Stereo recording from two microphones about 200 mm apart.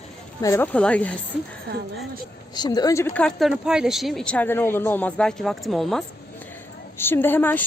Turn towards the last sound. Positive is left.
turn(degrees=10)  # may be behind; listen again after turning